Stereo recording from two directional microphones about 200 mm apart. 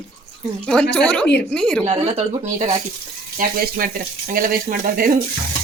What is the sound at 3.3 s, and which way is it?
Speech, 45° right (ahead or behind).